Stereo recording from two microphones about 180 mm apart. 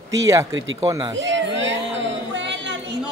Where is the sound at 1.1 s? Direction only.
90° right.